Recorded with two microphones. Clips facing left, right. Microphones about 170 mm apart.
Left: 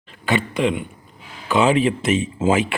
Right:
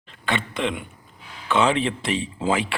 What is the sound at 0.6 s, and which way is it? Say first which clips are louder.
Speech: left 7 dB; 5° left (ahead or behind).